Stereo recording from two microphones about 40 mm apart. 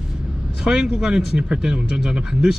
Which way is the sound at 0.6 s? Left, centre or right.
Centre.